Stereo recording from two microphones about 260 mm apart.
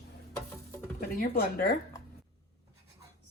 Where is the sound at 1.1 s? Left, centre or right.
Left.